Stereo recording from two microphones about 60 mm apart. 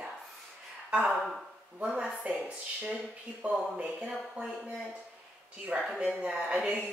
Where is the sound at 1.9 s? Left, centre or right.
Centre.